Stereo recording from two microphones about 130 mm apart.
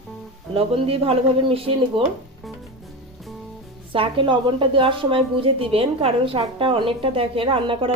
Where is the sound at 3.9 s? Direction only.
45° right (ahead or behind).